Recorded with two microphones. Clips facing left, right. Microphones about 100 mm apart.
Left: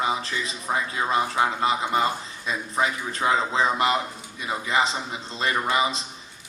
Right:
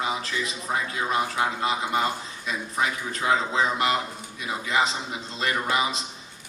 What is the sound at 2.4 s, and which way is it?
A man's voice, 30° left (ahead or behind).